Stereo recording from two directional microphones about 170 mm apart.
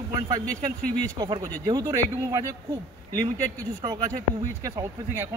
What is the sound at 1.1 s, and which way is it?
Speech, 25° right (ahead or behind).